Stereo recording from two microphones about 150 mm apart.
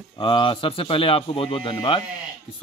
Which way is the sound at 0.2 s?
35° left (ahead or behind).